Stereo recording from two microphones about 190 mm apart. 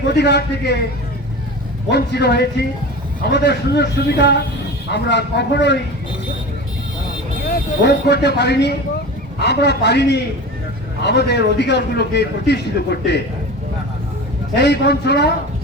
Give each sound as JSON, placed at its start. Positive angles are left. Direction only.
{"t": 0.1, "sound": "a man's voice", "side_deg": 60}
{"t": 1.9, "sound": "a man's voice", "side_deg": 60}
{"t": 7.4, "sound": "a man's voice", "side_deg": 55}
{"t": 14.5, "sound": "a man's voice", "side_deg": 60}